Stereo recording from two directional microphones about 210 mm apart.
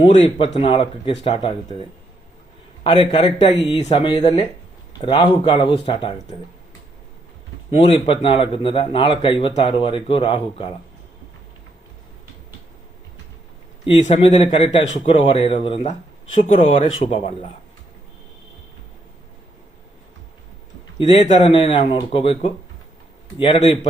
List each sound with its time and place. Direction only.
0.0 s speech: 25° left (ahead or behind)
2.8 s speech: 25° left (ahead or behind)
7.7 s speech: 25° left (ahead or behind)
13.8 s speech: 30° left (ahead or behind)
21.0 s speech: 25° left (ahead or behind)